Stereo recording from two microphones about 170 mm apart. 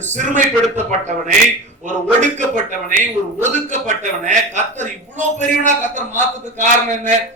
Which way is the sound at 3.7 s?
45° right (ahead or behind).